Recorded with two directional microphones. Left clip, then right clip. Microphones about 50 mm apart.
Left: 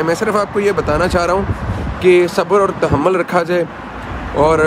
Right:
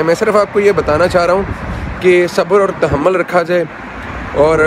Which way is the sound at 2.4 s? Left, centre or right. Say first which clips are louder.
Right 2 dB; left.